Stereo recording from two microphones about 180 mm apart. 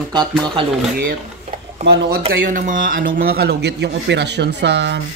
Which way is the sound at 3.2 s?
60° right (ahead or behind).